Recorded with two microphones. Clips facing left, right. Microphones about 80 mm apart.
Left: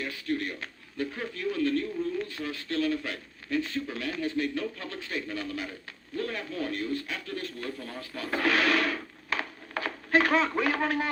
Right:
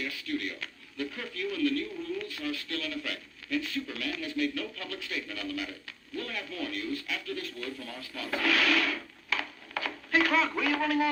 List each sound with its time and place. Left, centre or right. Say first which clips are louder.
0.0 s a man's voice: left 3 dB; left